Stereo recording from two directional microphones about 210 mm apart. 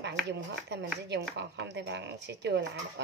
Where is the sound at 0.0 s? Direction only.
55° right (ahead or behind).